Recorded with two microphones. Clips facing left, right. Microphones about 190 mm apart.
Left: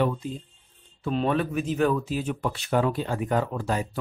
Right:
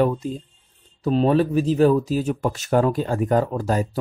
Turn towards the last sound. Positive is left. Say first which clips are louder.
# right 5 dB
turn(degrees=-40)  # may be behind; listen again after turning